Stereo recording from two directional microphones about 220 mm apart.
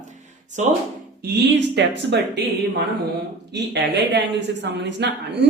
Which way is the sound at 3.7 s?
50° right (ahead or behind).